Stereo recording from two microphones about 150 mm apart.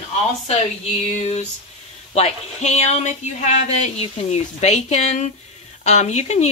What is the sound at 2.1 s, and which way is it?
Speech, 45° left (ahead or behind).